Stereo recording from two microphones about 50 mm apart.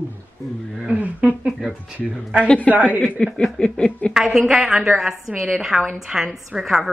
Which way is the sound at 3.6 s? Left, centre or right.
Centre.